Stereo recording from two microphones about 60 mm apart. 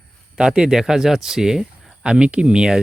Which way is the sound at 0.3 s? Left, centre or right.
Centre.